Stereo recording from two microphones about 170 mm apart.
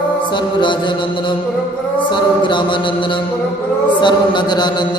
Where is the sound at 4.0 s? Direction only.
25° left (ahead or behind).